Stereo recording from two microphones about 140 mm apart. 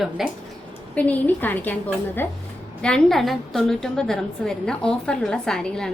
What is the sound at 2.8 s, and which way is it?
A woman's voice, 5° left (ahead or behind).